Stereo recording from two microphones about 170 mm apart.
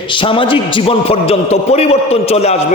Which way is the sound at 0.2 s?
30° left (ahead or behind).